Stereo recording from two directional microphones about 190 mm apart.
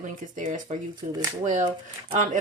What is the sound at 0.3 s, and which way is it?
Speech, 40° right (ahead or behind).